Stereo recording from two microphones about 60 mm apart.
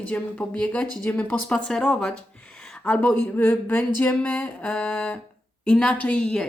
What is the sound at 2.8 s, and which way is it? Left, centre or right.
Speech, left.